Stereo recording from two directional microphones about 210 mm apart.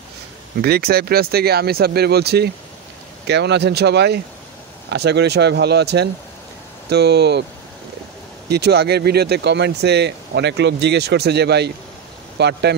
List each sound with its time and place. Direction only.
0.6 s speech: 50° right (ahead or behind)
8.5 s speech: 50° right (ahead or behind)